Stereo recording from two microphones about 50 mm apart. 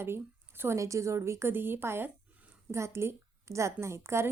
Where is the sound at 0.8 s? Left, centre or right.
Right.